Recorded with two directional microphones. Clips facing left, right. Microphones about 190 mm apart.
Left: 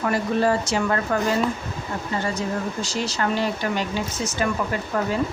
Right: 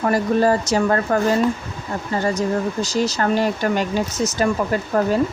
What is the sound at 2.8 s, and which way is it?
A woman's voice, 40° right (ahead or behind).